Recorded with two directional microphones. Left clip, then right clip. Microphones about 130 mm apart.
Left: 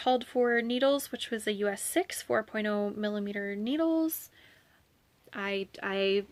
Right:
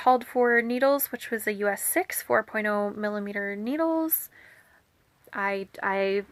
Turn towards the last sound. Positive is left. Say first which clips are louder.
# right 3 dB
turn(degrees=55)  # may be behind; listen again after turning